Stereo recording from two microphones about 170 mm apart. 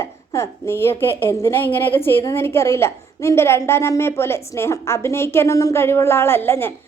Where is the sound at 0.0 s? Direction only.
20° left (ahead or behind).